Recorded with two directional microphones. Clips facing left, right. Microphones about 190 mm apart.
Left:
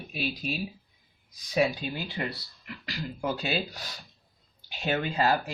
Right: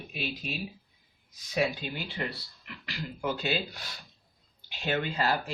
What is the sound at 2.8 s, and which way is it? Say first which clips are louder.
Speech: left 1 dB; 40° left (ahead or behind).